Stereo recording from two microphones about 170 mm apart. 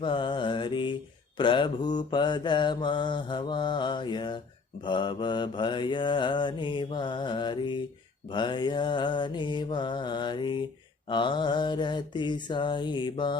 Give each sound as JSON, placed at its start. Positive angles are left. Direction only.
{"t": 0.0, "sound": "mantra", "side_deg": 30}